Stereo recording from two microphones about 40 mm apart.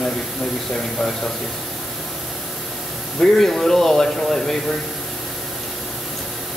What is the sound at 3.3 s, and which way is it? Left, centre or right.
Speech, centre.